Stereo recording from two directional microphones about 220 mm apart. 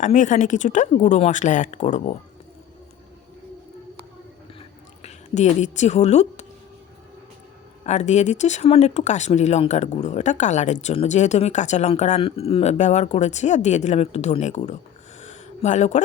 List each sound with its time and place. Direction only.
0.0 s speech: 35° left (ahead or behind)
5.0 s speech: 30° left (ahead or behind)
7.9 s speech: 30° left (ahead or behind)
15.2 s a sound: 30° left (ahead or behind)